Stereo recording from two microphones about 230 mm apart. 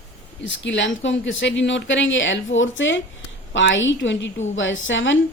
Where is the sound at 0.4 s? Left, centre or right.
Left.